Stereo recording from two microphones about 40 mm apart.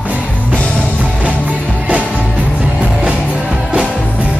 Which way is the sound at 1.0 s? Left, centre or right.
Right.